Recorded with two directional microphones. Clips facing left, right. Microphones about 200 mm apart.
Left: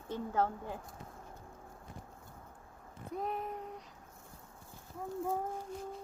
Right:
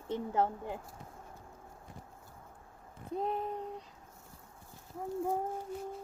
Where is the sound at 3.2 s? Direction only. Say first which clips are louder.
Right 3 dB; 30° right (ahead or behind).